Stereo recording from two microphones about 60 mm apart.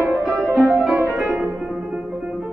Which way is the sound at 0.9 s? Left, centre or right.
Right.